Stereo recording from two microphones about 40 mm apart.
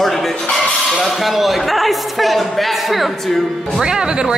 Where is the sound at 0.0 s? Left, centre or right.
Centre.